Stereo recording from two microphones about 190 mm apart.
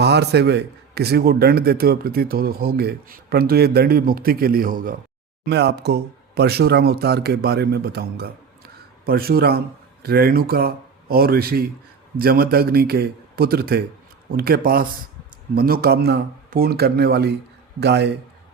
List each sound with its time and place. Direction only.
0.0 s a man's voice: 60° right (ahead or behind)
5.5 s a man's voice: 60° right (ahead or behind)